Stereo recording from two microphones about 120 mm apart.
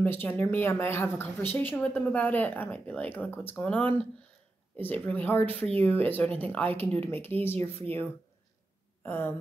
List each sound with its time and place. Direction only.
0.0 s a woman's voice: 20° left (ahead or behind)
9.0 s speech: 20° left (ahead or behind)